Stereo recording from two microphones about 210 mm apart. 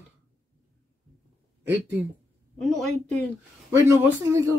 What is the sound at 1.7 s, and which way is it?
Speech, 10° right (ahead or behind).